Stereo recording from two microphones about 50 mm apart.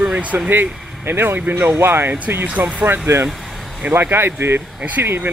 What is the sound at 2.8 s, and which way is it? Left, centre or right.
Speech, right.